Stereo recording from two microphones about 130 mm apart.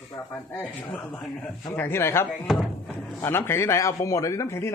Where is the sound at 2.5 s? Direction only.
Centre (ahead or behind).